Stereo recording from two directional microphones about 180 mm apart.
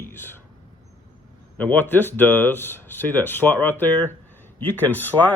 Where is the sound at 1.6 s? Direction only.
10° left (ahead or behind).